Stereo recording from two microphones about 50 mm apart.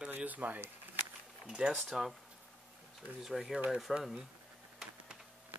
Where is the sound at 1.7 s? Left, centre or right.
Centre.